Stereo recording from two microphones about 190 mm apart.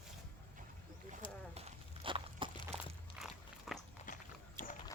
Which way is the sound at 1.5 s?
35° right (ahead or behind).